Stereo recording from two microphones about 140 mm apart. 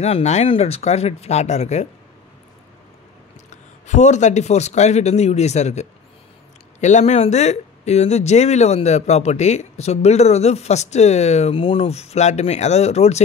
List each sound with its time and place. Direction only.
0.0 s speech: 50° left (ahead or behind)
3.4 s speech: 55° left (ahead or behind)